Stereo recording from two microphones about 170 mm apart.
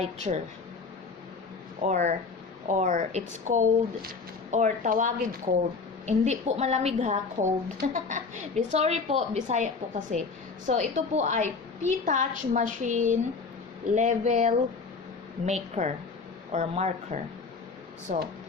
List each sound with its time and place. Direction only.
0.0 s speech: 40° right (ahead or behind)
1.9 s a woman's voice: 45° right (ahead or behind)